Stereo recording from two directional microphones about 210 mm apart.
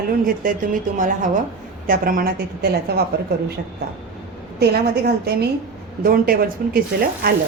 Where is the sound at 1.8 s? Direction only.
40° right (ahead or behind).